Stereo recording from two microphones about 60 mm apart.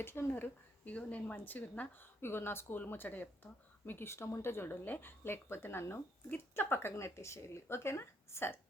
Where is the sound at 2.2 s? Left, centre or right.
Left.